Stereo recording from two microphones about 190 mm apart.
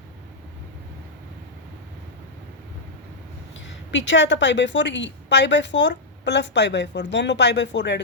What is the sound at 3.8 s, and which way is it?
A woman's voice, 75° left (ahead or behind).